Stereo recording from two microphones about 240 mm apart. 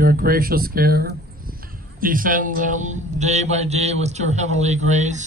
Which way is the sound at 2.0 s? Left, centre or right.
Right.